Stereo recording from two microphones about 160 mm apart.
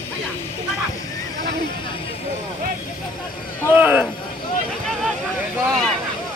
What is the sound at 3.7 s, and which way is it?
Speech, 10° right (ahead or behind).